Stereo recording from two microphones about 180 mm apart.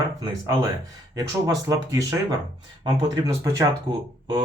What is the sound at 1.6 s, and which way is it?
Speech, 20° right (ahead or behind).